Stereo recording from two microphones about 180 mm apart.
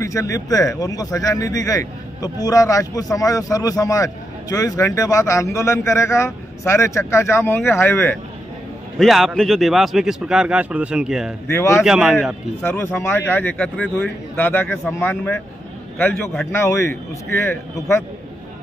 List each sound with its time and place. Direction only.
0.0 s speech: 15° left (ahead or behind)
8.9 s speech: centre (ahead or behind)
11.4 s speech: 15° left (ahead or behind)
11.8 s speech: 5° right (ahead or behind)
12.6 s speech: 15° left (ahead or behind)
14.3 s speech: 10° left (ahead or behind)